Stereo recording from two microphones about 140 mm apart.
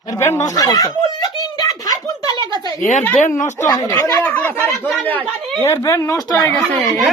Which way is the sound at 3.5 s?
25° left (ahead or behind).